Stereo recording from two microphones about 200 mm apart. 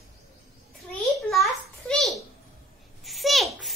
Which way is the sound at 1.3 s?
Centre (ahead or behind).